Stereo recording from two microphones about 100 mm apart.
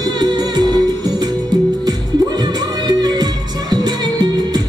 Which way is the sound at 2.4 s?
45° right (ahead or behind).